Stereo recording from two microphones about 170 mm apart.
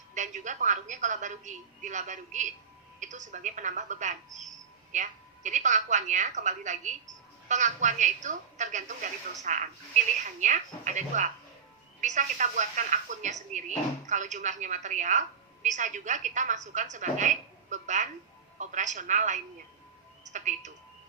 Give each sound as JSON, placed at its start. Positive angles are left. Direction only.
{"t": 0.1, "sound": "speech", "side_deg": -45}